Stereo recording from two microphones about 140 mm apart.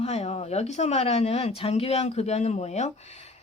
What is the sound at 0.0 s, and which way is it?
Speech, 50° left (ahead or behind).